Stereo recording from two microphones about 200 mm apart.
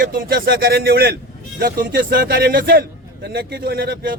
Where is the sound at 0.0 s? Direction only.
45° right (ahead or behind).